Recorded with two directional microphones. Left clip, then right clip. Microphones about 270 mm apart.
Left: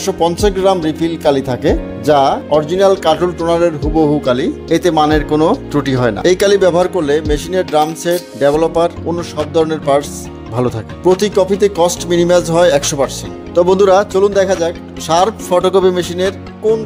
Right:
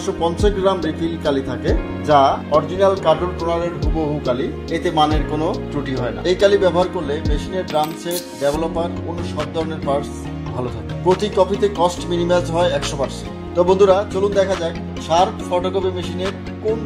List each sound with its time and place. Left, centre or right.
0.0 s speech: left
4.7 s speech: left